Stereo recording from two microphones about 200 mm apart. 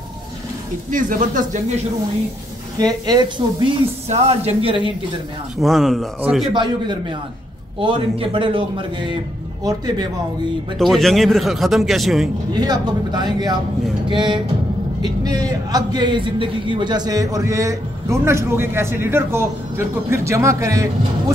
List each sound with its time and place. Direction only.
0.9 s speech: 40° right (ahead or behind)
2.8 s a man's voice: 20° right (ahead or behind)
5.6 s a man's voice: centre (ahead or behind)
6.5 s a man's voice: 25° right (ahead or behind)
10.8 s a man's voice: centre (ahead or behind)
12.5 s a man's voice: 20° right (ahead or behind)